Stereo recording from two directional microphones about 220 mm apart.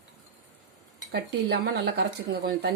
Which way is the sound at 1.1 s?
50° right (ahead or behind).